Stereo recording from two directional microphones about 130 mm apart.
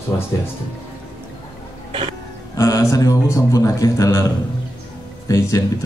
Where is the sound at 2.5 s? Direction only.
25° left (ahead or behind).